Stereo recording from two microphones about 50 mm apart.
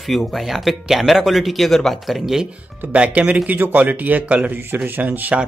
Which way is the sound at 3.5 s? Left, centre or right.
Right.